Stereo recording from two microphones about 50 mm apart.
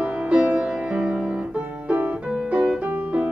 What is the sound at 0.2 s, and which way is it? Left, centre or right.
Music, right.